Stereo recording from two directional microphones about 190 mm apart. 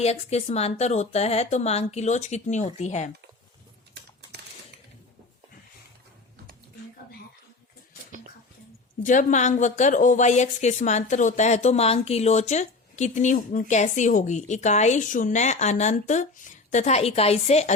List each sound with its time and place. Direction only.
0.0 s a woman's voice: 35° left (ahead or behind)
9.0 s a woman's voice: 40° left (ahead or behind)